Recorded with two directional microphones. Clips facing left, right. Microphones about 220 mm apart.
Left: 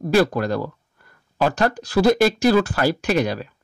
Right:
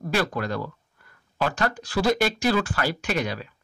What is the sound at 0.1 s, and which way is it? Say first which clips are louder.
Speech: left 8 dB; 40° left (ahead or behind).